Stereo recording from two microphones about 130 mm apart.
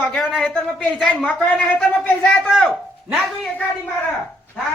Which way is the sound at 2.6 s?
5° right (ahead or behind).